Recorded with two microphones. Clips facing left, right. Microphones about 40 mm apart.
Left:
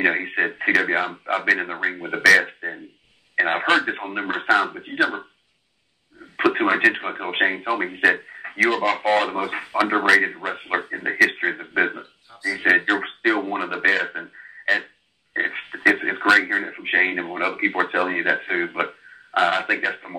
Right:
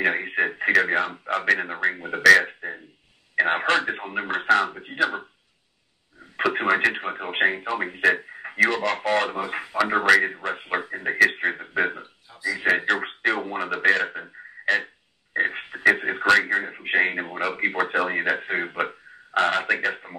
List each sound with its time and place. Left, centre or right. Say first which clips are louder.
0.0 s speech: left 2 dB; centre
2.4 s a sound: left 2 dB; centre
3.6 s speech: left 3 dB; left
6.3 s a man's voice: left 2 dB; centre
8.6 s speech: left 4 dB; left
11.8 s a sound: left 3 dB; centre
12.9 s speech: left 3 dB; centre
16.6 s speech: left 2 dB; centre
19.3 s speech: left 2 dB; left